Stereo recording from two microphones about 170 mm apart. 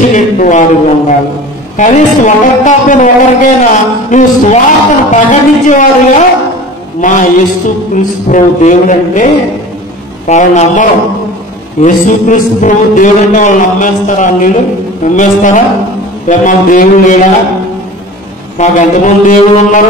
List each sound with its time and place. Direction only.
0.1 s a man's voice: 50° left (ahead or behind)
18.6 s speech: 50° left (ahead or behind)